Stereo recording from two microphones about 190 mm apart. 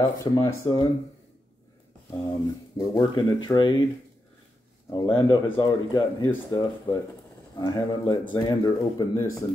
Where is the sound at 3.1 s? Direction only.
25° left (ahead or behind).